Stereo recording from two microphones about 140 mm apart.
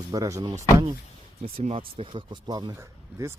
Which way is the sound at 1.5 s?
45° right (ahead or behind).